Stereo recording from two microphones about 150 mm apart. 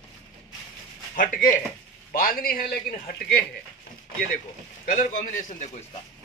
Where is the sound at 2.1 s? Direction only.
75° left (ahead or behind).